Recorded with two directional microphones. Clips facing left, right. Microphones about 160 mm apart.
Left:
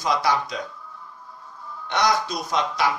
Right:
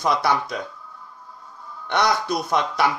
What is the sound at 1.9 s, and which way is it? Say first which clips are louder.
Speech: right 1 dB; 60° right (ahead or behind).